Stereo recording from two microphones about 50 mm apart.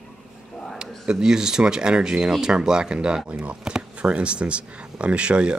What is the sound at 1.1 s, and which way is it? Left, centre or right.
Speech, centre.